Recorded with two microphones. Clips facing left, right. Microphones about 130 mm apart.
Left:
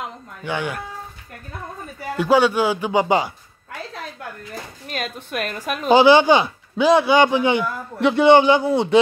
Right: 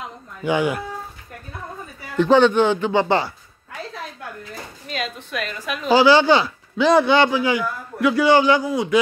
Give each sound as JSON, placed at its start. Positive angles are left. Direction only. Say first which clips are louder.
{"t": 0.4, "sound": "speech", "louder": "right 5 dB", "side_deg": -10}
{"t": 2.1, "sound": "a man's voice", "louder": "right 2 dB", "side_deg": 10}
{"t": 4.8, "sound": "a sound", "louder": "right 1 dB", "side_deg": 50}
{"t": 5.9, "sound": "a man's voice", "louder": "left 2 dB", "side_deg": 20}